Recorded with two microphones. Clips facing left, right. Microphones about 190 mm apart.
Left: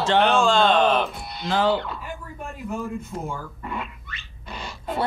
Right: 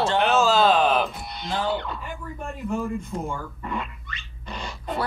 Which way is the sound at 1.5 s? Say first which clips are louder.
Left 5 dB; 90° left.